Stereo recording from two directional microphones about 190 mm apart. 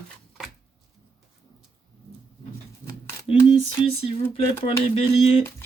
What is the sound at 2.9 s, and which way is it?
Speech, 25° left (ahead or behind).